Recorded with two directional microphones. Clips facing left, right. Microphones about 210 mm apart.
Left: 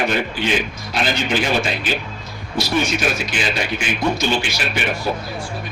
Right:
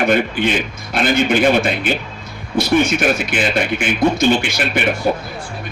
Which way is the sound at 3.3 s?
55° right (ahead or behind).